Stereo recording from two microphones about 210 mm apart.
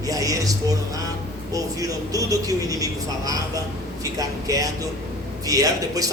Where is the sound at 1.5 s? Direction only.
15° right (ahead or behind).